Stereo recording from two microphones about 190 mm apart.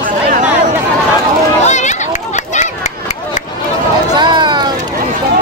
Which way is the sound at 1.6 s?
40° left (ahead or behind).